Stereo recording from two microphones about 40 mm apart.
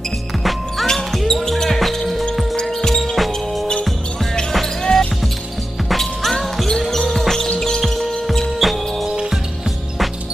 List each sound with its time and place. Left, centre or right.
0.4 s music: centre
0.8 s basketball bounce: centre
2.6 s music: centre
4.9 s basketball bounce: centre
5.9 s music: centre
6.8 s basketball bounce: centre
7.8 s music: centre